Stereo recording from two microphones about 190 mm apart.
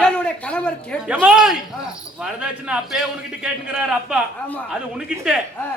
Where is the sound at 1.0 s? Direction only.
5° right (ahead or behind).